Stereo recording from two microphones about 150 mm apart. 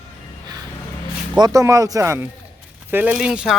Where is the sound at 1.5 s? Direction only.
20° right (ahead or behind).